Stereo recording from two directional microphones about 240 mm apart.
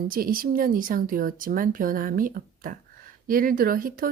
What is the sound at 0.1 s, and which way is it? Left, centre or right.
A woman's voice, right.